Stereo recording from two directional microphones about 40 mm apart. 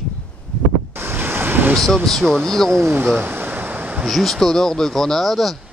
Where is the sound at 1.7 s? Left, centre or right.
Centre.